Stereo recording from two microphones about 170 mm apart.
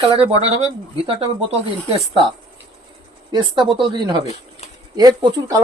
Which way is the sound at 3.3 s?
30° right (ahead or behind).